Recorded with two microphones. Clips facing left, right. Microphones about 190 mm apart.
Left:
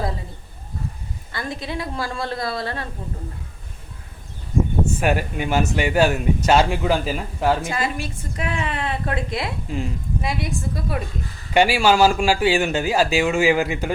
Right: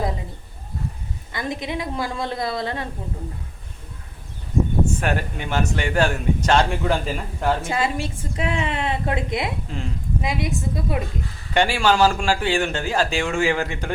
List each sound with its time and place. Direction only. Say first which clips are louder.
1.3 s a woman's voice: right 2 dB; 20° right (ahead or behind)
4.9 s speech: left 3 dB; 10° left (ahead or behind)
7.6 s a woman's voice: right 2 dB; 25° right (ahead or behind)
9.7 s speech: left 5 dB; 10° left (ahead or behind)
10.2 s a woman's voice: right 2 dB; 20° right (ahead or behind)
11.5 s speech: left 2 dB; 10° left (ahead or behind)